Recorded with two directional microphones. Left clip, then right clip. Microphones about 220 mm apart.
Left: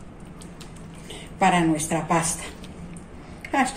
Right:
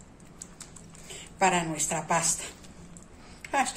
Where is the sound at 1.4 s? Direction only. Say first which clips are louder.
Left 5 dB; 50° right (ahead or behind).